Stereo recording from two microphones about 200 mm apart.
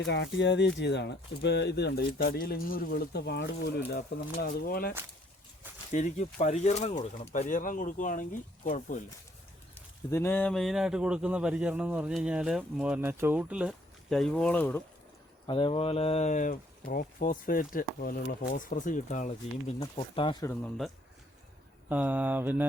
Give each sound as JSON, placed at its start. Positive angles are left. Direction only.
{"t": 0.0, "sound": "speech", "side_deg": 60}
{"t": 5.9, "sound": "speech", "side_deg": 40}
{"t": 9.7, "sound": "a man's voice", "side_deg": 10}
{"t": 15.4, "sound": "speech", "side_deg": 25}
{"t": 19.8, "sound": "speech", "side_deg": 25}
{"t": 20.4, "sound": "speech", "side_deg": 10}
{"t": 21.8, "sound": "mantra", "side_deg": -10}